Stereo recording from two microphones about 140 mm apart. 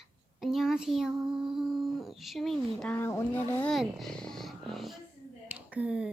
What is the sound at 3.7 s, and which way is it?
A woman's voice, centre (ahead or behind).